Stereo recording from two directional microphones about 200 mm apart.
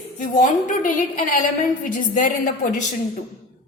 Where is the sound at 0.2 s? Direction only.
40° left (ahead or behind).